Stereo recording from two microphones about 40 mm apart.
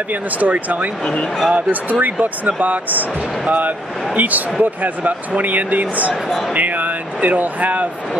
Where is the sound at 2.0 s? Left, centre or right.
Right.